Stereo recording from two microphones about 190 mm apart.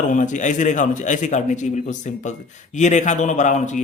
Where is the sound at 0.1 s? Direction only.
40° left (ahead or behind).